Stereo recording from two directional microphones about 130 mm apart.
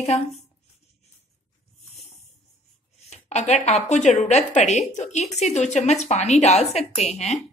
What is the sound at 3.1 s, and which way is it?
A woman's voice, 60° left (ahead or behind).